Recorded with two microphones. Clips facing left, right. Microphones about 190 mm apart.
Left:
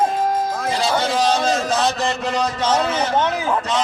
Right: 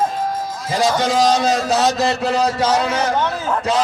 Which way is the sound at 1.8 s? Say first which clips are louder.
Right 3 dB; 40° right (ahead or behind).